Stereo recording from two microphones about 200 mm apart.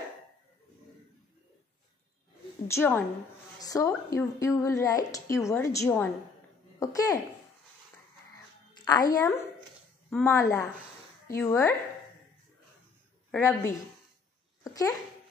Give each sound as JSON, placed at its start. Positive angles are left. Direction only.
{"t": 2.7, "sound": "a woman's voice", "side_deg": 10}
{"t": 8.7, "sound": "a woman's voice", "side_deg": 20}
{"t": 13.3, "sound": "speech", "side_deg": 15}
{"t": 14.6, "sound": "babbling", "side_deg": 15}